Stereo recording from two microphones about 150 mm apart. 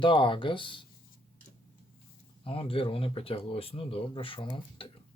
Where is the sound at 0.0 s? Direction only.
35° left (ahead or behind).